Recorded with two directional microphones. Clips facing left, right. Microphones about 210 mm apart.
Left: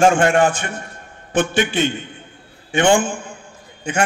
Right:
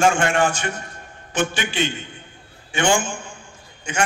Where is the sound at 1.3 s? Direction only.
55° left (ahead or behind).